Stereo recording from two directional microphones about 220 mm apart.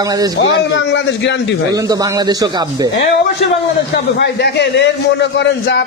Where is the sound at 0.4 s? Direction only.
55° left (ahead or behind).